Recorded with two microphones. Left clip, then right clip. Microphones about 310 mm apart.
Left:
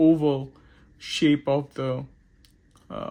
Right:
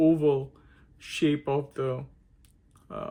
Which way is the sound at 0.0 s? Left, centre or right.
Left.